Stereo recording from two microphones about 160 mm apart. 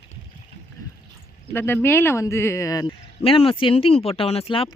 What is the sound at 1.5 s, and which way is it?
Speech, 15° left (ahead or behind).